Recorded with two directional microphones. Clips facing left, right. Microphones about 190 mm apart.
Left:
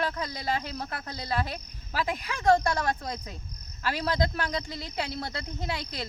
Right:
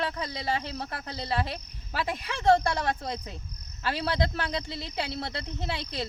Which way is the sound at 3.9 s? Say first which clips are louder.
Left 1 dB; 30° right (ahead or behind).